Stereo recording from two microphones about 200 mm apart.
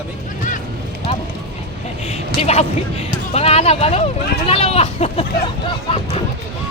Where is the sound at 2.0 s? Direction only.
30° left (ahead or behind).